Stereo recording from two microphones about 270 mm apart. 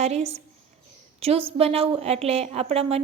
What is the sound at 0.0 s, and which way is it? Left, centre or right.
A woman's voice, right.